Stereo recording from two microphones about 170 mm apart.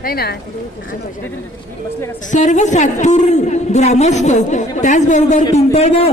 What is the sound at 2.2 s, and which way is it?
A woman's voice, 45° left (ahead or behind).